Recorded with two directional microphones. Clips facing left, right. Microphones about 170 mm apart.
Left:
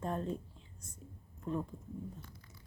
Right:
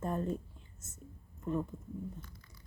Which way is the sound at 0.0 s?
5° right (ahead or behind).